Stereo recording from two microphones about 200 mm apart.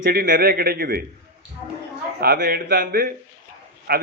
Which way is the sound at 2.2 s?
50° right (ahead or behind).